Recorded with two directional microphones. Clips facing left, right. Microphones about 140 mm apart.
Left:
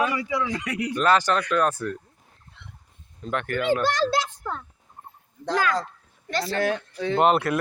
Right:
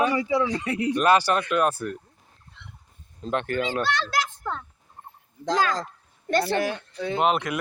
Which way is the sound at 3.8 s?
40° left (ahead or behind).